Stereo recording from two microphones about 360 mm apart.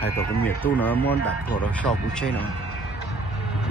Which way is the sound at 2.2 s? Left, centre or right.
Centre.